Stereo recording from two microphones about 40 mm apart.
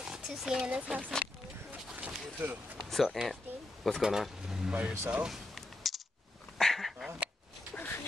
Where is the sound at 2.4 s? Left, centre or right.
Right.